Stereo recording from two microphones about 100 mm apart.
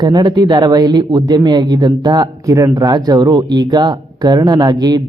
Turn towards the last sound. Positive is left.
turn(degrees=-45)  # may be behind; listen again after turning